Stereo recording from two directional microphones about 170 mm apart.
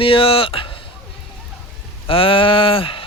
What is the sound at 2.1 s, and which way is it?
Speech, 30° left (ahead or behind).